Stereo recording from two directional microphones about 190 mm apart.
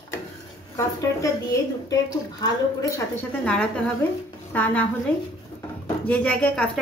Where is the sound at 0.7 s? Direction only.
15° left (ahead or behind).